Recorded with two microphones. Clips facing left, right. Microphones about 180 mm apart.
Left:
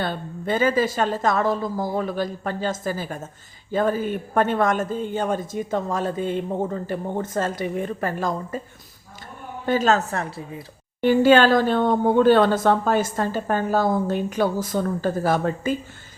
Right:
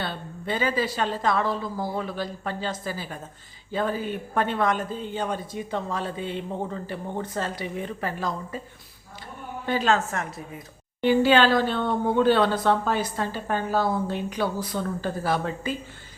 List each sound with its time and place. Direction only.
0.0 s speech: 45° left (ahead or behind)
9.6 s a woman's voice: 45° left (ahead or behind)
11.0 s speech: 45° left (ahead or behind)